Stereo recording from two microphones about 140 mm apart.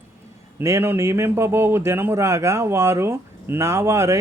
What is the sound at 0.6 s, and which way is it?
Speech, 20° right (ahead or behind).